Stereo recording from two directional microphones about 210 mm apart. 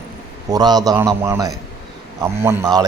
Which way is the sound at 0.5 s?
20° right (ahead or behind).